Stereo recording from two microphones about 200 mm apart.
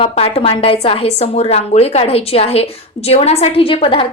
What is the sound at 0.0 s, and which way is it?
A woman's voice, 30° left (ahead or behind).